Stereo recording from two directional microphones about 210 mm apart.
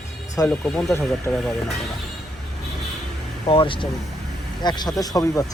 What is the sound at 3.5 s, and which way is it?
Speech, 25° left (ahead or behind).